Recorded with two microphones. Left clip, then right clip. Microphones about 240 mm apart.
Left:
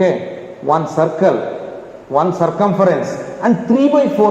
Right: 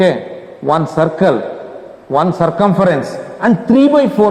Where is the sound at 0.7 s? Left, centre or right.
Right.